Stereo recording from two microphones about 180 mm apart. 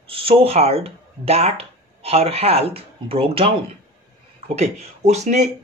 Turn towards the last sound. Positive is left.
turn(degrees=-40)  # may be behind; listen again after turning